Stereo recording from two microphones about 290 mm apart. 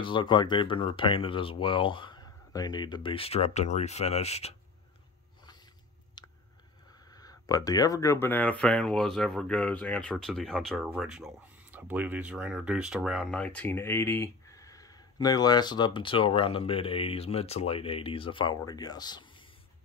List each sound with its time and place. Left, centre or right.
0.0 s speech: centre
6.2 s chewing: centre
7.1 s speech: centre